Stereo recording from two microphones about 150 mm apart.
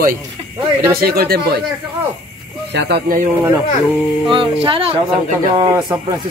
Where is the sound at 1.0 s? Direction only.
90° right.